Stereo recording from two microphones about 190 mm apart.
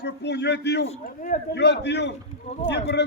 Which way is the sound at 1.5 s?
65° left (ahead or behind).